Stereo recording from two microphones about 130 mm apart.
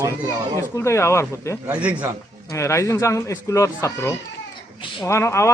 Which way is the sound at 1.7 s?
10° right (ahead or behind).